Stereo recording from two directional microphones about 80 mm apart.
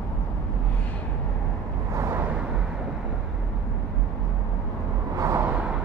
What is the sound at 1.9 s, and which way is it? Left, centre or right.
Vehicle, right.